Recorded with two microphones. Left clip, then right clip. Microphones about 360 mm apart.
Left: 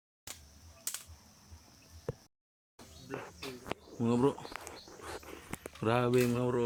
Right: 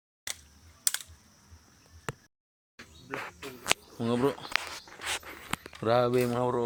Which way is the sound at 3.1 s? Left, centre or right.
Right.